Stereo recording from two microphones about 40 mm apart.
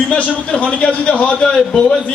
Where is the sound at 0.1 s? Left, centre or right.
Left.